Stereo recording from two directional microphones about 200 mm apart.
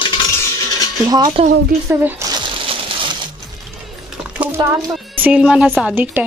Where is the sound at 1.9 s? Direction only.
15° right (ahead or behind).